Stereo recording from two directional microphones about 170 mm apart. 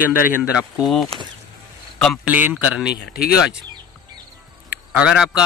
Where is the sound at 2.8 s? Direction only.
70° left (ahead or behind).